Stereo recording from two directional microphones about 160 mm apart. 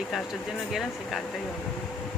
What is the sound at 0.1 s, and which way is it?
Speech, centre (ahead or behind).